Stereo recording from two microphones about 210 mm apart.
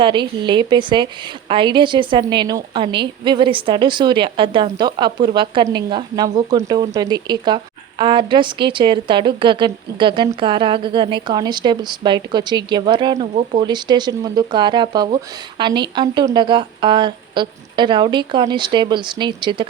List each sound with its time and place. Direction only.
0.0 s a woman's voice: 20° right (ahead or behind)